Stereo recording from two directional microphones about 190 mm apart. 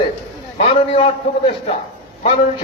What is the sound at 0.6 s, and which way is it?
A man's voice, 30° left (ahead or behind).